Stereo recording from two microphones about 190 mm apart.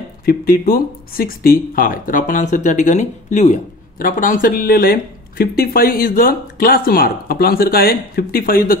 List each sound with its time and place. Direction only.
0.2 s speech: 50° left (ahead or behind)